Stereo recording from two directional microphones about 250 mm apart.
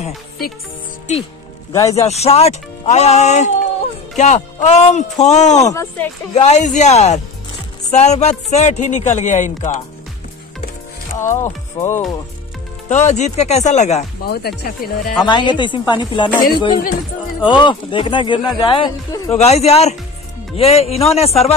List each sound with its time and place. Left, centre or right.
1.7 s speech: centre
2.0 s speech: left
5.7 s speech: centre
6.3 s speech: left
11.4 s speech: centre
12.8 s speech: left
15.2 s speech: centre